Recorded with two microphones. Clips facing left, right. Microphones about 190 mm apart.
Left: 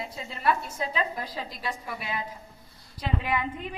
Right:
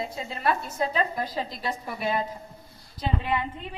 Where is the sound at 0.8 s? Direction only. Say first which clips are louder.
Right 6 dB; 40° right (ahead or behind).